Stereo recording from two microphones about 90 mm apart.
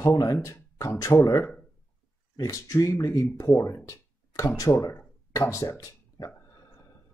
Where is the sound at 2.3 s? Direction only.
40° left (ahead or behind).